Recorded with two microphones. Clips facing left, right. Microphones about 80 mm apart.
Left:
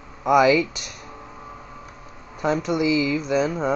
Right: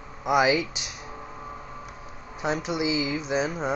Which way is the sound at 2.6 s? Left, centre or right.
Left.